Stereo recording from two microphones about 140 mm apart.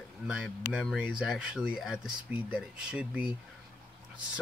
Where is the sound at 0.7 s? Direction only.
5° right (ahead or behind).